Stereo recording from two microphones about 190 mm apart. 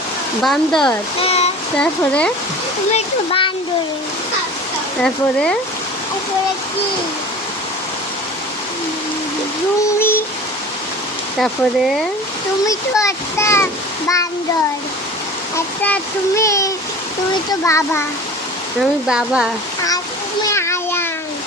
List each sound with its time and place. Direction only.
0.4 s speech: centre (ahead or behind)
1.2 s a sound: 30° left (ahead or behind)
2.0 s a child's voice: 5° left (ahead or behind)
2.9 s speech: 30° left (ahead or behind)
5.0 s speech: 5° left (ahead or behind)
10.0 s a sound: 10° left (ahead or behind)
11.3 s speech: centre (ahead or behind)
12.6 s a child's voice: 15° left (ahead or behind)
15.5 s a child's voice: 10° left (ahead or behind)
18.8 s speech: 5° right (ahead or behind)
20.5 s a sound: 15° left (ahead or behind)